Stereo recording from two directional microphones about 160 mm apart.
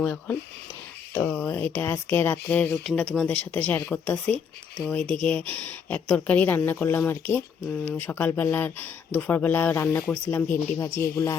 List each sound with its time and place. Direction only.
0.0 s a woman's voice: 10° left (ahead or behind)